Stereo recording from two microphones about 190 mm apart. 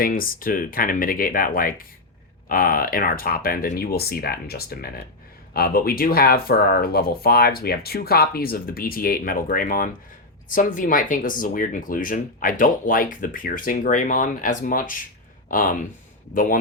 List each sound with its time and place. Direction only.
0.0 s speech: 50° left (ahead or behind)